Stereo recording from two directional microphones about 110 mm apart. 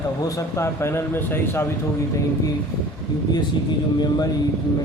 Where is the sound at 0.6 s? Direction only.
25° left (ahead or behind).